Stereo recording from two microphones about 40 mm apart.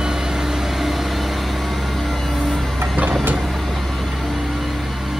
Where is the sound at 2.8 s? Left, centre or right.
Right.